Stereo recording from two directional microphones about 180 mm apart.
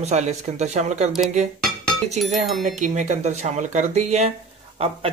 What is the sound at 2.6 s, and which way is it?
Speech, 45° right (ahead or behind).